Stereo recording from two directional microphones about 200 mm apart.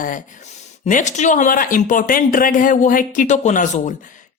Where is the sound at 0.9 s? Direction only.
40° left (ahead or behind).